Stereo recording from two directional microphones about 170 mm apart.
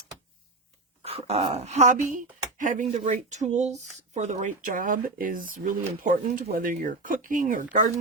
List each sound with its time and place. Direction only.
1.0 s speech: 35° right (ahead or behind)